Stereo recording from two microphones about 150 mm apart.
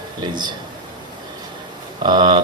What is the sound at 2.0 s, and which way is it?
Speech, 30° right (ahead or behind).